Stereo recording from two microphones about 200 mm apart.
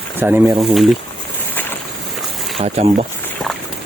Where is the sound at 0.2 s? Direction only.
10° right (ahead or behind).